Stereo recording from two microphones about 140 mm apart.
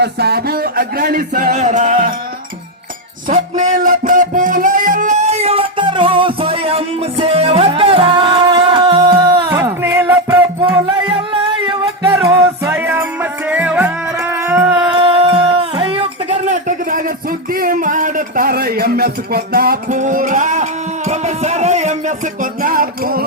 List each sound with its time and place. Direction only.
0.4 s music: 90° right
3.2 s music: 80° right; by 9.5 s 30° right (ahead or behind)
9.5 s music: 20° right (ahead or behind)
10.6 s music: 35° right (ahead or behind)
12.0 s music: 20° right (ahead or behind)
14.9 s music: 40° right (ahead or behind)
16.5 s a sound: 70° right (ahead or behind)
17.5 s music: 90° right; by 22.1 s 55° right (ahead or behind)
22.6 s music: 90° right